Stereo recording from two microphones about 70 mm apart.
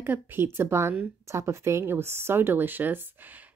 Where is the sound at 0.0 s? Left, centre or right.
Right.